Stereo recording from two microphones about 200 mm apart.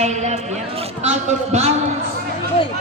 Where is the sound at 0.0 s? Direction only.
35° right (ahead or behind).